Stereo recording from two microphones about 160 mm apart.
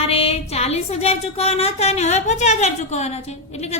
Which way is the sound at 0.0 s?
35° left (ahead or behind).